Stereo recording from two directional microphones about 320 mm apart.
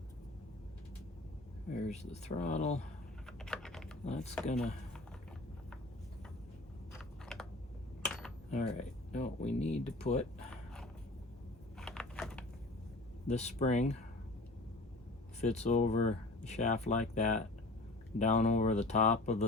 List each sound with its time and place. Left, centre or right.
1.7 s speech: centre
3.2 s typing: centre
4.0 s speech: centre
6.9 s a sound: centre
8.4 s speech: left
11.8 s typing: centre
13.2 s speech: left
15.4 s speech: left